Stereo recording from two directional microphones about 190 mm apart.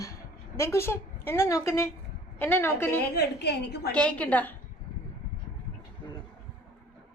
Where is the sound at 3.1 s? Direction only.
60° left (ahead or behind).